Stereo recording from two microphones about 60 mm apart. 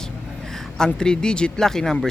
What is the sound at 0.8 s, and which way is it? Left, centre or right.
Speech, centre.